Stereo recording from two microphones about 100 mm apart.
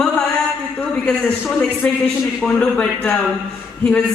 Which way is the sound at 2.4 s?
10° left (ahead or behind).